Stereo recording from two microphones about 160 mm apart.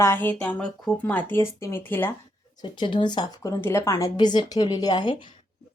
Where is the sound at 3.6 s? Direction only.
15° left (ahead or behind).